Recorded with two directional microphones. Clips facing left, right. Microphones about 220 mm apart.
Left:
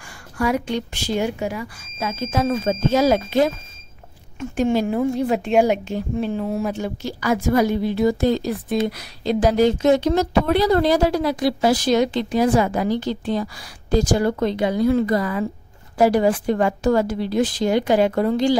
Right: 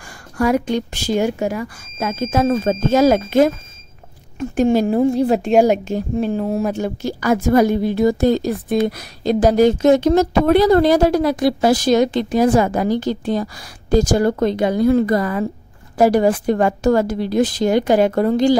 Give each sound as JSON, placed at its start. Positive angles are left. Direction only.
{"t": 0.4, "sound": "a woman's voice", "side_deg": -45}